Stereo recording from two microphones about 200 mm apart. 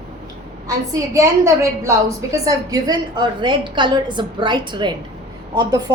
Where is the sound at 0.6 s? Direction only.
15° right (ahead or behind).